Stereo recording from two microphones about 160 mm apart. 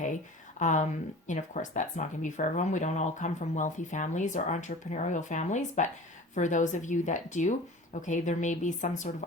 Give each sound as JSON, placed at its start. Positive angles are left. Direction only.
{"t": 0.6, "sound": "speech", "side_deg": 50}